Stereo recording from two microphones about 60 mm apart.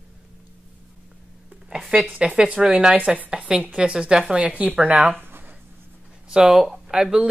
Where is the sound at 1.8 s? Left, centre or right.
Centre.